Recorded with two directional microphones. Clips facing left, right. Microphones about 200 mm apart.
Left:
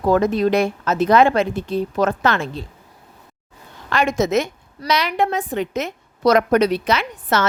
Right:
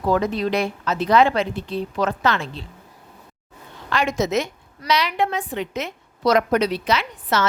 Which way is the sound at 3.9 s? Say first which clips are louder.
Left 3 dB; 50° left (ahead or behind).